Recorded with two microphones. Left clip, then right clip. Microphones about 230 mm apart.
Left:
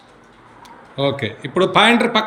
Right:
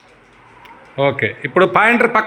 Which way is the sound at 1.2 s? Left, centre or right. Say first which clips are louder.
Right 5 dB; centre.